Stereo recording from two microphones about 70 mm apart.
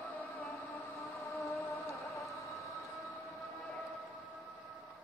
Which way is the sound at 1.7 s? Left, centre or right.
Left.